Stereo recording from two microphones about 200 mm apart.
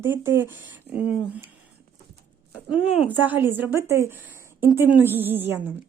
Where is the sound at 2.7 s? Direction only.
5° right (ahead or behind).